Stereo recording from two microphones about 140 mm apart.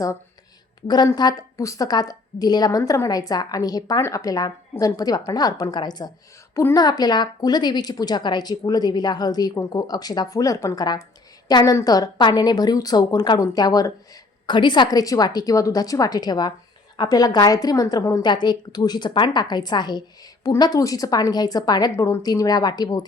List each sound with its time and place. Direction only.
0.9 s a woman's voice: 30° left (ahead or behind)
6.6 s a woman's voice: 20° left (ahead or behind)
6.8 s a woman's voice: 30° left (ahead or behind)